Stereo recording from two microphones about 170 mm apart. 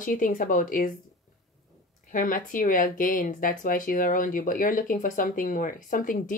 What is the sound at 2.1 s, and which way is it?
Speech, 50° left (ahead or behind).